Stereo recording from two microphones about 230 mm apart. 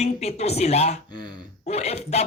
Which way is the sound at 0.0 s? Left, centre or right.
Left.